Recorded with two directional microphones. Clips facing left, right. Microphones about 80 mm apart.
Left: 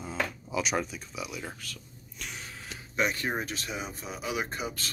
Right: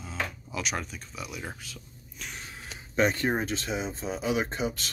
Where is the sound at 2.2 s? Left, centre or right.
Centre.